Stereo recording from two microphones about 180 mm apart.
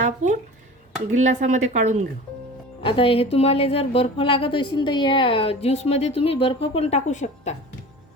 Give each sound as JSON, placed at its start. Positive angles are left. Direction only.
{"t": 1.1, "sound": "speech", "side_deg": -40}
{"t": 2.8, "sound": "a woman's voice", "side_deg": 30}